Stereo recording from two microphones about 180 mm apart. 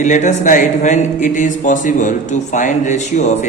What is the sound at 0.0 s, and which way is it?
Speech, 45° left (ahead or behind).